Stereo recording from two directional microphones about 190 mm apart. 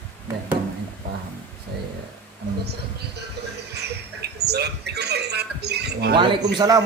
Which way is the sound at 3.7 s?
60° right (ahead or behind).